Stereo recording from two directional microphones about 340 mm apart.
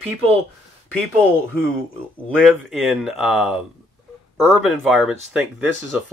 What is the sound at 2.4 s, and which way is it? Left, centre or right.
Speech, centre.